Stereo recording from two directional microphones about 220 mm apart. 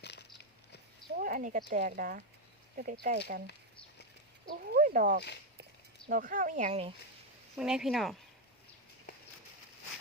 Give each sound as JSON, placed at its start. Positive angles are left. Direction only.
{"t": 0.0, "sound": "biting", "side_deg": 50}
{"t": 1.2, "sound": "speech", "side_deg": -40}
{"t": 4.6, "sound": "speech", "side_deg": -40}
{"t": 7.5, "sound": "speech", "side_deg": -5}